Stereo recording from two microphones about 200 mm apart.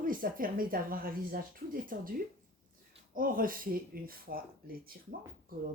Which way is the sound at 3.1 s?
45° right (ahead or behind).